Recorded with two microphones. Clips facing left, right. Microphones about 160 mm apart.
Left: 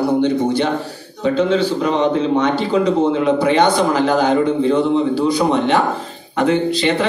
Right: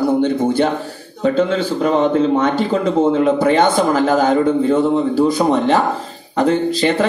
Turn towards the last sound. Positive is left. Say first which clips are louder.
# right 1 dB
turn(degrees=-45)  # may be behind; listen again after turning